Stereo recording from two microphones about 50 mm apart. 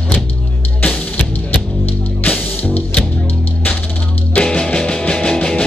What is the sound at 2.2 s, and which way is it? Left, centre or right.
Music, left.